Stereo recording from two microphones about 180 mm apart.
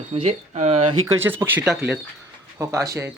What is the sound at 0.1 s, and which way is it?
Speech, 35° right (ahead or behind).